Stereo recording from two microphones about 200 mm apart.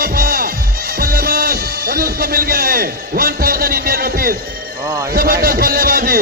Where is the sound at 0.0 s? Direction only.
50° right (ahead or behind).